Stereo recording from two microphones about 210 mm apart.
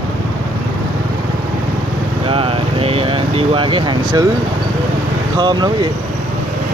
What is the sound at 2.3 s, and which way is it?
Speech, 25° right (ahead or behind).